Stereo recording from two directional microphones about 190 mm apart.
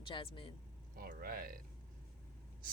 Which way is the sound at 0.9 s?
50° right (ahead or behind).